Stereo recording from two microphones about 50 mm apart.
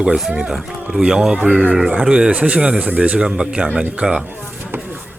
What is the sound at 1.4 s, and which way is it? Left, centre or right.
Speech, right.